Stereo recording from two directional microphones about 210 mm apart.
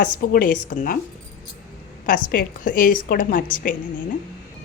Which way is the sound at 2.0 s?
40° left (ahead or behind).